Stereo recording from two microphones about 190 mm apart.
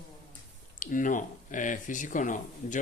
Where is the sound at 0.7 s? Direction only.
45° left (ahead or behind).